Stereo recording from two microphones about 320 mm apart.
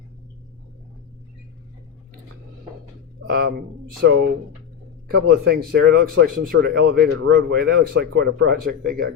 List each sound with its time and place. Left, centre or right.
3.2 s speech: right
5.0 s speech: right